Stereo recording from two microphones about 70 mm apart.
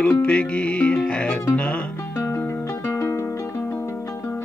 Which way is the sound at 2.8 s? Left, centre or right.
Left.